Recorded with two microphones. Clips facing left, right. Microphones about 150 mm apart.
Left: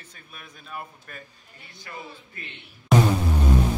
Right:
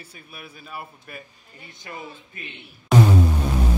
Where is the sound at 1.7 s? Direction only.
20° right (ahead or behind).